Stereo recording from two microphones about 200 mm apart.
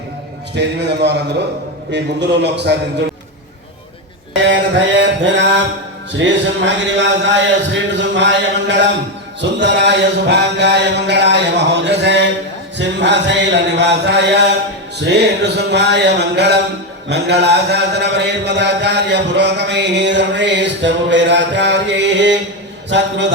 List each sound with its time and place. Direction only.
0.5 s mantra: 60° right (ahead or behind)
2.4 s mantra: 60° right (ahead or behind)
4.4 s mantra: 65° right (ahead or behind)